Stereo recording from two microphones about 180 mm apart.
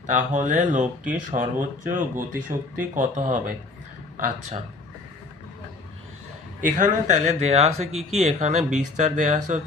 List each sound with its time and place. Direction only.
0.1 s speech: 45° right (ahead or behind)
6.6 s speech: 45° right (ahead or behind)